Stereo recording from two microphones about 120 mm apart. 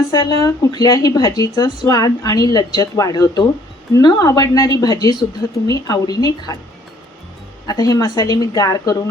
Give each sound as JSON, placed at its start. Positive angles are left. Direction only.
{"t": 0.1, "sound": "speech", "side_deg": 35}
{"t": 7.7, "sound": "speech", "side_deg": 30}